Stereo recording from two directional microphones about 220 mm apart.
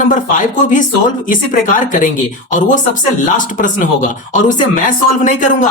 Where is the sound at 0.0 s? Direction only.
35° left (ahead or behind).